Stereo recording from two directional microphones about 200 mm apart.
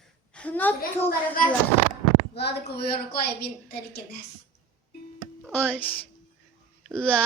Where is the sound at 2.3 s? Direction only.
55° left (ahead or behind).